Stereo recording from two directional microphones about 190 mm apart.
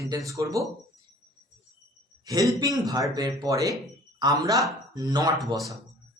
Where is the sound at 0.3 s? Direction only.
15° right (ahead or behind).